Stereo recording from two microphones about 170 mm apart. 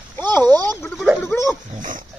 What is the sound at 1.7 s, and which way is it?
Pig, 55° right (ahead or behind).